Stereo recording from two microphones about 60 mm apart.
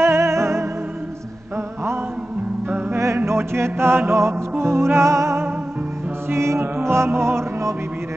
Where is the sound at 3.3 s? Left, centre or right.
Right.